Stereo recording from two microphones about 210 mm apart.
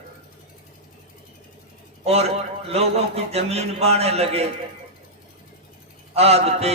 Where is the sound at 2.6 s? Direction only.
30° right (ahead or behind).